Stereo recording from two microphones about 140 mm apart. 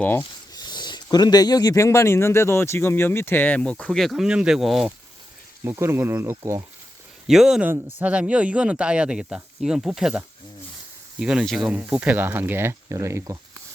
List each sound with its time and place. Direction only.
0.0 s speech: 10° left (ahead or behind)
0.5 s a sound: 30° left (ahead or behind)
1.1 s speech: 30° left (ahead or behind); by 4.9 s centre (ahead or behind)
5.6 s speech: 20° right (ahead or behind)
7.3 s speech: 5° right (ahead or behind); by 13.4 s 20° right (ahead or behind)